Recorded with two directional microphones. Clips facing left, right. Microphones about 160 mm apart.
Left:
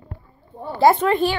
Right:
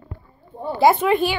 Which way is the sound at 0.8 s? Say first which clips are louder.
Even; 5° right (ahead or behind).